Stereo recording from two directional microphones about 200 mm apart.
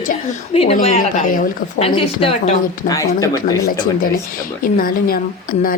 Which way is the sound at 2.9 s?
15° left (ahead or behind).